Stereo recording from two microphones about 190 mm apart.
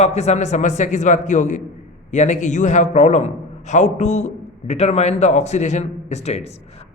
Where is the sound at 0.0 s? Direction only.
35° left (ahead or behind).